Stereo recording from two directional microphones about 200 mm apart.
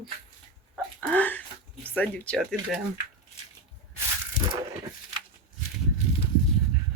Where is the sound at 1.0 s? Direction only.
10° left (ahead or behind).